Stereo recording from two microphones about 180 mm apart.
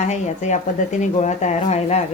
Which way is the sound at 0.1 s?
40° left (ahead or behind).